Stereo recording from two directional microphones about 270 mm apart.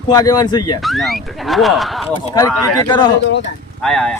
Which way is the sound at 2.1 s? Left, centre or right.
Centre.